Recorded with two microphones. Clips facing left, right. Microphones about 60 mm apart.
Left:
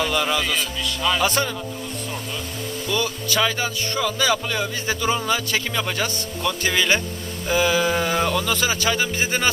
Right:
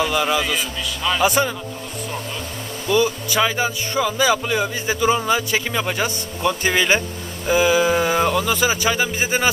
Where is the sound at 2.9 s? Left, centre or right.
Centre.